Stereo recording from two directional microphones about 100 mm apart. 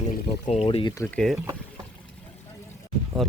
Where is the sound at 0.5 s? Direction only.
80° left.